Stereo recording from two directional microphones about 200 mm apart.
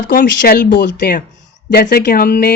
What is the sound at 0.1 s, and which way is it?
Speech, 45° left (ahead or behind).